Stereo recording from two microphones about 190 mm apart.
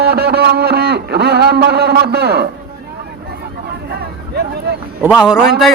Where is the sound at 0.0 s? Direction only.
55° right (ahead or behind).